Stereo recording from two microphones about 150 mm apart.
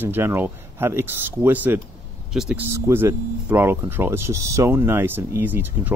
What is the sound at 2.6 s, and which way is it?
Speech, 15° right (ahead or behind).